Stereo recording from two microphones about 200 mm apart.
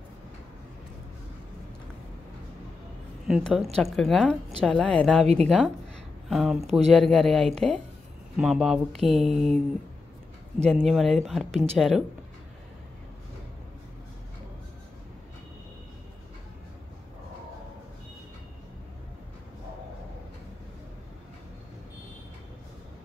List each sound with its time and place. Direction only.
3.3 s speech: centre (ahead or behind)
5.2 s a woman's voice: 30° right (ahead or behind)
6.2 s speech: centre (ahead or behind)
10.6 s speech: 5° left (ahead or behind)